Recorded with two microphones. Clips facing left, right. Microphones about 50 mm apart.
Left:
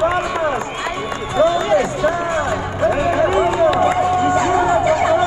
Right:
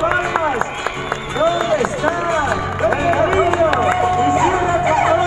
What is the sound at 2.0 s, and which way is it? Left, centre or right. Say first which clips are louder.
Speech: right 1 dB; right.